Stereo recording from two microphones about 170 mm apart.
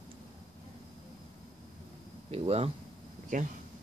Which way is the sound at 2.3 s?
35° right (ahead or behind).